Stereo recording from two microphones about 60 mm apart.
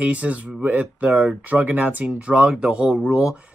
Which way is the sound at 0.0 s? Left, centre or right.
Right.